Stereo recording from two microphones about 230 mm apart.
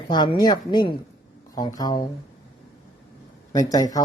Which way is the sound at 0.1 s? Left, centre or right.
Centre.